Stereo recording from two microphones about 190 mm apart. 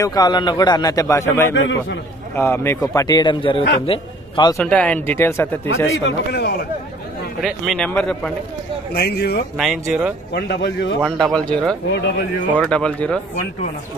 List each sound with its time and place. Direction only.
0.0 s a man's voice: 20° left (ahead or behind)
1.5 s a man's voice: 80° left
2.3 s a man's voice: 15° left (ahead or behind)
4.6 s speech: 5° left (ahead or behind)
6.0 s speech: 60° left (ahead or behind)
7.4 s speech: centre (ahead or behind)
8.9 s speech: 55° left (ahead or behind)
9.6 s speech: centre (ahead or behind)
10.3 s speech: 65° left (ahead or behind)
11.0 s speech: centre (ahead or behind)